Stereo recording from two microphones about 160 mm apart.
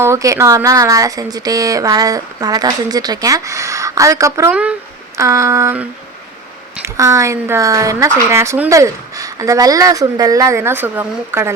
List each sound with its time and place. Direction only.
0.0 s speech: 20° right (ahead or behind)
5.1 s a sound: 20° right (ahead or behind)
6.8 s speech: 20° right (ahead or behind)